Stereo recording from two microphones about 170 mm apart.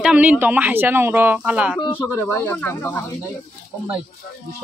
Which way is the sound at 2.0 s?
10° left (ahead or behind).